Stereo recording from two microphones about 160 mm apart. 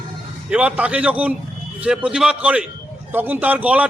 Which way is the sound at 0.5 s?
10° right (ahead or behind).